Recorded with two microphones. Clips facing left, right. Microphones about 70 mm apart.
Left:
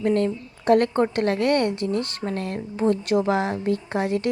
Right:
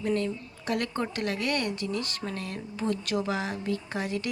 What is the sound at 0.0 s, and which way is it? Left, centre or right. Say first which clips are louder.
A woman's voice: left 7 dB; left.